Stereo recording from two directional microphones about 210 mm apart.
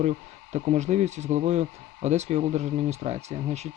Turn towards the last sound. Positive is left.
turn(degrees=-30)  # may be behind; listen again after turning